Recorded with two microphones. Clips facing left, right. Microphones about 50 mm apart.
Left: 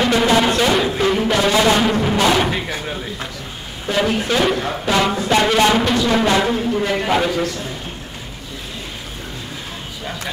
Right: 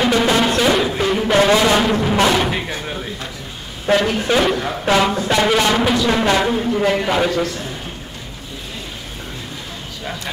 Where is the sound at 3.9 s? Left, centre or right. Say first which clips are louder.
Right 4 dB; right.